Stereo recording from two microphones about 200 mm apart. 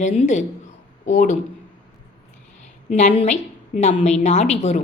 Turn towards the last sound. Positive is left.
turn(degrees=35)  # may be behind; listen again after turning